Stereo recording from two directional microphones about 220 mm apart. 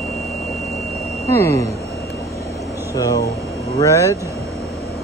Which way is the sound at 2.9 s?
15° left (ahead or behind).